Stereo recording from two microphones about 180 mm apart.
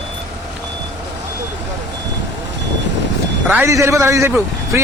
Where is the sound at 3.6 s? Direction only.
15° right (ahead or behind).